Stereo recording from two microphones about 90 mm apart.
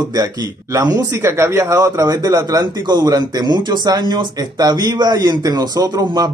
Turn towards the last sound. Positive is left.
turn(degrees=-50)  # may be behind; listen again after turning